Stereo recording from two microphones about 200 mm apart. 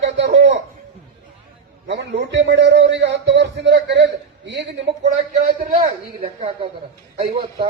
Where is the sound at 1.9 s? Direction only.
60° right (ahead or behind).